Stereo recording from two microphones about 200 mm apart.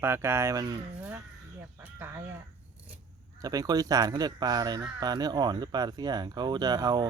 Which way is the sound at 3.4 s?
20° right (ahead or behind).